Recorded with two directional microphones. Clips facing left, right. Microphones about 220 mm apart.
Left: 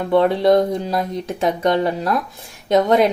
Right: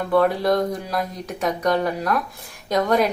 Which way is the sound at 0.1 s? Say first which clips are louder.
Left 5 dB; 25° left (ahead or behind).